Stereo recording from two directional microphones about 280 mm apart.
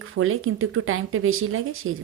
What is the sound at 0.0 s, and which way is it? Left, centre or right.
Speech, right.